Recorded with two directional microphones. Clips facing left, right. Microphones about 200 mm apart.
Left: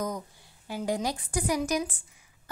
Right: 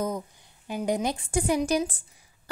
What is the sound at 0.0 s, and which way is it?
A woman's voice, 20° right (ahead or behind).